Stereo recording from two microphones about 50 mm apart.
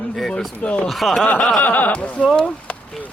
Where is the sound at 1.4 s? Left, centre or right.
Centre.